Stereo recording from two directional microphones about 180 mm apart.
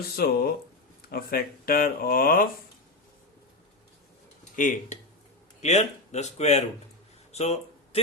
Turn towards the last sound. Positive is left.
turn(degrees=35)  # may be behind; listen again after turning